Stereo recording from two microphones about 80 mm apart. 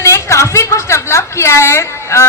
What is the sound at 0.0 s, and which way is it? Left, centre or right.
A woman's voice, left.